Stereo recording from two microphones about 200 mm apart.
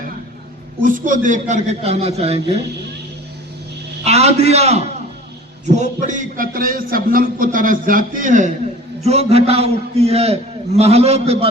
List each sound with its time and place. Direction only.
0.8 s a man's voice: 40° right (ahead or behind)
4.0 s a man's voice: 30° right (ahead or behind)